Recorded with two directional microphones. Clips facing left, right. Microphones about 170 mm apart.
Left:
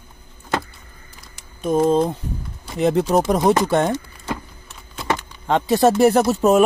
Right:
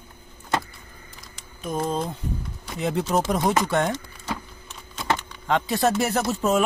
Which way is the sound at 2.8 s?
40° left (ahead or behind).